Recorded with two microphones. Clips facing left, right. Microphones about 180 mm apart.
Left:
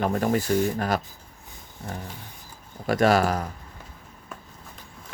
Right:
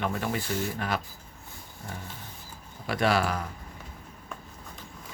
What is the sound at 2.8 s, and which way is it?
Speech, 45° left (ahead or behind).